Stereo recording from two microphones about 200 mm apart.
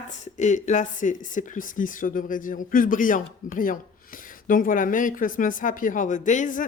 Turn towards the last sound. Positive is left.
turn(degrees=40)  # may be behind; listen again after turning